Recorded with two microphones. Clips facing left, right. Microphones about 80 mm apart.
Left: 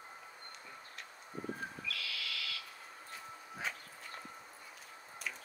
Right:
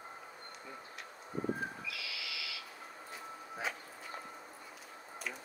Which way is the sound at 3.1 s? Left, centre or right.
Centre.